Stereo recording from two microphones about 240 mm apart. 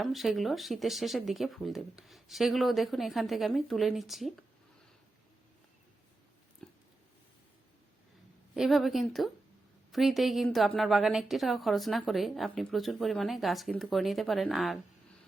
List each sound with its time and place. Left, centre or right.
0.0 s a woman's voice: centre
6.6 s a sound: centre
8.5 s a woman's voice: centre